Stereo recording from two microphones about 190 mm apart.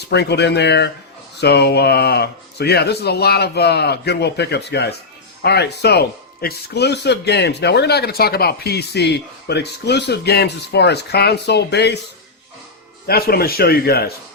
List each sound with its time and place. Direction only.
0.1 s speech: 60° left (ahead or behind)
13.1 s a man's voice: 55° left (ahead or behind)